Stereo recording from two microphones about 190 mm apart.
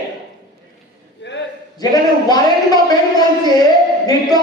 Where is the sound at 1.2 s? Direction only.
65° left (ahead or behind).